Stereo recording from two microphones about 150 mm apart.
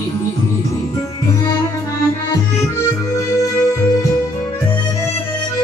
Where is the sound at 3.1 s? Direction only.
20° left (ahead or behind).